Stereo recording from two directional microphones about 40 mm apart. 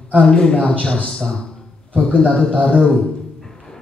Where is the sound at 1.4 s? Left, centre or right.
Centre.